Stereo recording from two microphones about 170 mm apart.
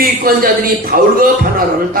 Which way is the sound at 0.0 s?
55° right (ahead or behind).